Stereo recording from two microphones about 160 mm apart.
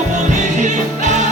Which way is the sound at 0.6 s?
50° right (ahead or behind).